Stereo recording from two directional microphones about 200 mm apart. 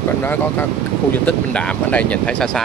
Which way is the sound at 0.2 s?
10° left (ahead or behind).